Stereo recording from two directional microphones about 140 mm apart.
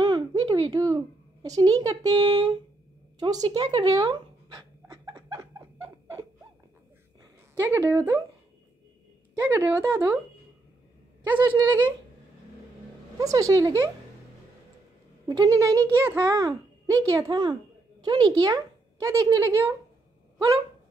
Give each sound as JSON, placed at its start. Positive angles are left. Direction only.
{"t": 0.0, "sound": "a child's voice", "side_deg": -30}
{"t": 3.2, "sound": "pant", "side_deg": -30}
{"t": 7.5, "sound": "speech", "side_deg": -15}
{"t": 9.3, "sound": "a child's voice", "side_deg": -20}
{"t": 13.2, "sound": "a child's voice", "side_deg": -25}
{"t": 15.2, "sound": "a child's voice", "side_deg": -25}